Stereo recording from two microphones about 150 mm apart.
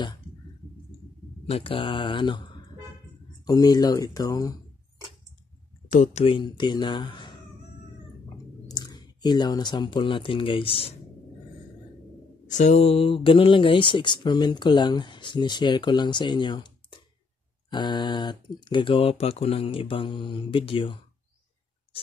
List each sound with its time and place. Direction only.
1.5 s speech: 40° left (ahead or behind); by 4.6 s 20° left (ahead or behind)
5.9 s speech: 55° left (ahead or behind)
6.2 s speech: 35° left (ahead or behind)
8.6 s speech: 25° left (ahead or behind)
12.4 s speech: 50° left (ahead or behind); by 21.0 s 35° left (ahead or behind)